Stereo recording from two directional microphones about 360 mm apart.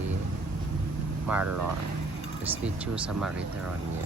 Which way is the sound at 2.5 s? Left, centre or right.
Centre.